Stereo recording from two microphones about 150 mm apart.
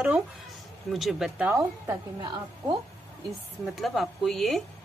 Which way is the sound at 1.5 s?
20° right (ahead or behind).